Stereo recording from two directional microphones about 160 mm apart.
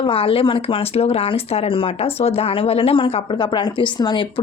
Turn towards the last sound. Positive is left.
turn(degrees=30)  # may be behind; listen again after turning